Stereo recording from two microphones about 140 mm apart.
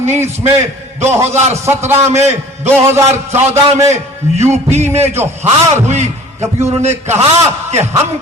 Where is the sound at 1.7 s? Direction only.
15° right (ahead or behind).